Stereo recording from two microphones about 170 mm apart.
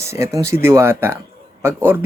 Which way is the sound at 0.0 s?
15° right (ahead or behind).